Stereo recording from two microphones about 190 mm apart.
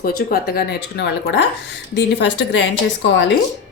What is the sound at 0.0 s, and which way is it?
A woman's voice, 55° left (ahead or behind).